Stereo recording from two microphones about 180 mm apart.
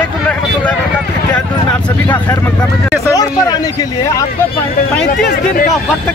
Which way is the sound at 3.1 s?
20° left (ahead or behind).